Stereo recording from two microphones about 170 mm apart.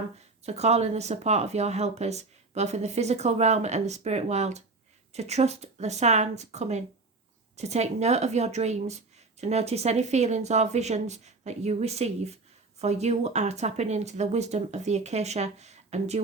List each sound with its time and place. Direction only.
0.4 s a woman's voice: 40° right (ahead or behind)